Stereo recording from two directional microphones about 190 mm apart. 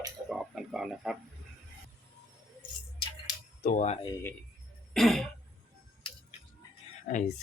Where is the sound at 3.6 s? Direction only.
40° left (ahead or behind).